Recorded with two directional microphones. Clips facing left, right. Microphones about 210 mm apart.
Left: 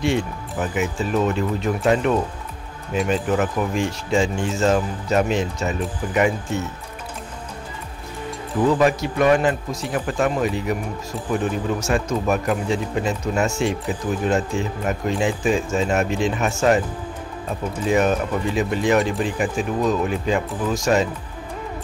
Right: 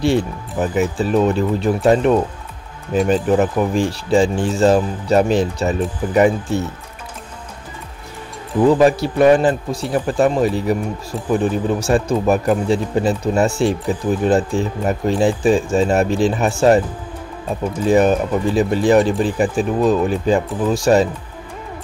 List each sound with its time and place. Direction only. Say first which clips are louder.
0.0 s speech: right 5 dB; 35° right (ahead or behind)
8.6 s speech: right 5 dB; 35° right (ahead or behind)
17.8 s speech: right 5 dB; 35° right (ahead or behind)